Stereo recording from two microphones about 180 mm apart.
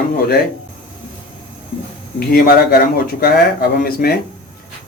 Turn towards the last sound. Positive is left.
turn(degrees=55)  # may be behind; listen again after turning